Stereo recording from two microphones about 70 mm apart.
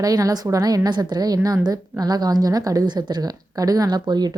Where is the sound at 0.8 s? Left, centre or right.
Right.